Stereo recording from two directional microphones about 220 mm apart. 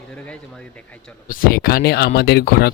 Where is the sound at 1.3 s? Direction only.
40° left (ahead or behind).